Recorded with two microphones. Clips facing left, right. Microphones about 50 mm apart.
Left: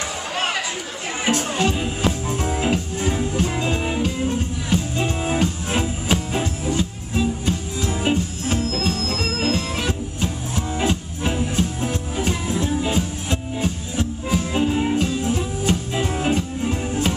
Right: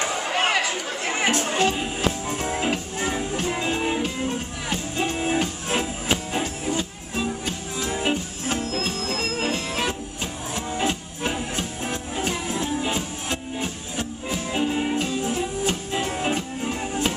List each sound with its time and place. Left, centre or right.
0.0 s chatter: right
1.2 s speech: right
1.5 s music: centre
16.0 s music: centre
16.3 s music: centre